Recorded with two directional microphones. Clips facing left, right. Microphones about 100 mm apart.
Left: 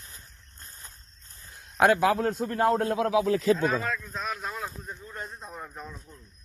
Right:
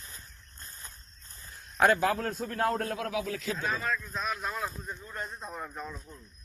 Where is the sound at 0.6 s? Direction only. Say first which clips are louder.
Even; 20° left (ahead or behind).